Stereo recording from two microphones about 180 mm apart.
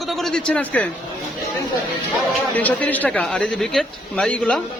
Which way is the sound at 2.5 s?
10° left (ahead or behind).